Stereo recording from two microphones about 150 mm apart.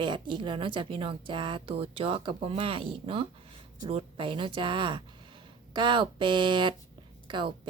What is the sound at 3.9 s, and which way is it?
Speech, 35° right (ahead or behind).